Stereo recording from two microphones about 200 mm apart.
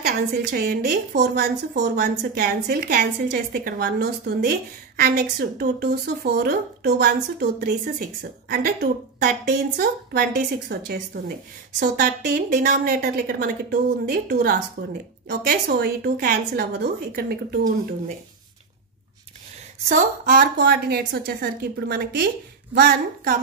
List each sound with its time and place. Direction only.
0.0 s a woman's voice: 50° right (ahead or behind)
19.9 s a woman's voice: 45° right (ahead or behind)